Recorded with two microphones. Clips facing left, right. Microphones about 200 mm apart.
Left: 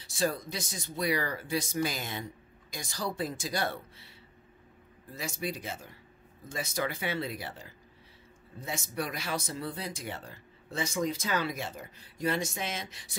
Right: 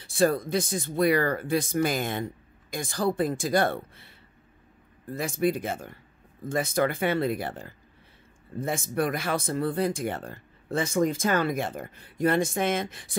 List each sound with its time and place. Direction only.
0.0 s speech: 55° right (ahead or behind)
5.1 s speech: 55° right (ahead or behind)